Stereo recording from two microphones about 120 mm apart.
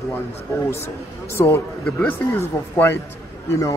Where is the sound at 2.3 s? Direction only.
20° left (ahead or behind).